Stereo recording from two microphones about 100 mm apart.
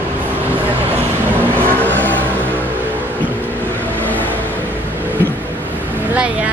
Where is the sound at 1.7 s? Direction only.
20° left (ahead or behind).